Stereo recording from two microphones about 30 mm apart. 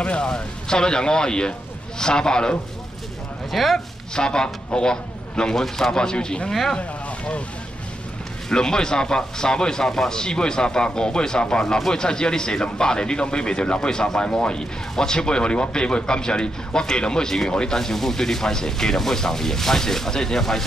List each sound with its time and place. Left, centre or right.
0.2 s a man's voice: left
3.5 s speech: centre
4.1 s a man's voice: left
6.8 s boat: left
8.5 s a man's voice: left
17.7 s speech: centre